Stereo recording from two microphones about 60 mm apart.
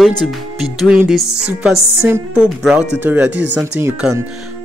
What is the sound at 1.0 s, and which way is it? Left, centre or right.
Music, centre.